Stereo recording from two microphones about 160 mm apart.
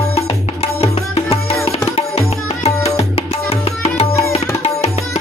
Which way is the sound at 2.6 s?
40° left (ahead or behind).